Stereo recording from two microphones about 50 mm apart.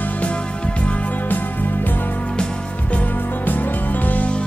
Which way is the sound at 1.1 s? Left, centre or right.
Left.